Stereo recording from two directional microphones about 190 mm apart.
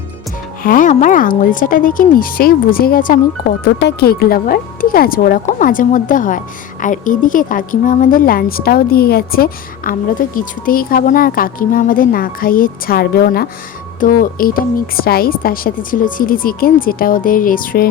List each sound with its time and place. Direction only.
0.6 s a woman's voice: 45° left (ahead or behind)